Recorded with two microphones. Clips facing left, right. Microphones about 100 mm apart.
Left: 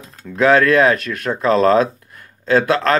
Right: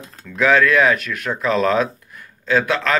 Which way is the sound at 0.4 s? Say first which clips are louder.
Left 3 dB; 40° left (ahead or behind).